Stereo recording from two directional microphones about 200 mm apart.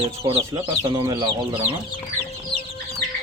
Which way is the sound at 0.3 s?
30° right (ahead or behind).